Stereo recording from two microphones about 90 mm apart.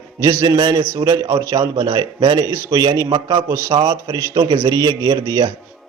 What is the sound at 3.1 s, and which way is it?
Speech, 65° right (ahead or behind).